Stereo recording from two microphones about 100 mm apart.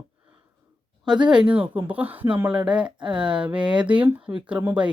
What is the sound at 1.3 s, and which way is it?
Speech, 10° right (ahead or behind).